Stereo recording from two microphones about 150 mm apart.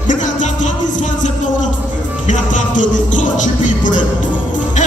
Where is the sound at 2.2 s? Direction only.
60° left (ahead or behind).